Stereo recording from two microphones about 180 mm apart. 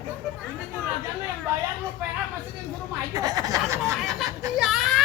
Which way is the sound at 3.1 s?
20° right (ahead or behind).